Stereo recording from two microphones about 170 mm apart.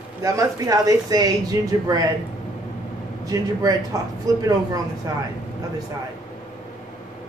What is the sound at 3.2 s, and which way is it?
Speech, 20° right (ahead or behind).